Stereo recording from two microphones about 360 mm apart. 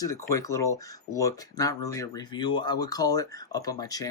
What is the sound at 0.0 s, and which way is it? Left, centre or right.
Speech, centre.